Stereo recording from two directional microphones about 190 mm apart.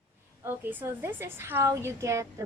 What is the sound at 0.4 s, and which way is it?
A woman's voice, 10° right (ahead or behind).